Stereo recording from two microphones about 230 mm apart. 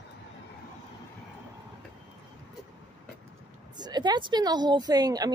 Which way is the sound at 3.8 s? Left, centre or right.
Centre.